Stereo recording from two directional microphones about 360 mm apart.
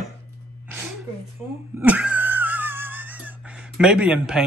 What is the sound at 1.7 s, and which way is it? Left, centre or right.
Wheeze, centre.